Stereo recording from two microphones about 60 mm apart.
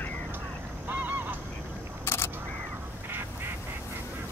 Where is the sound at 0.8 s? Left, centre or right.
Right.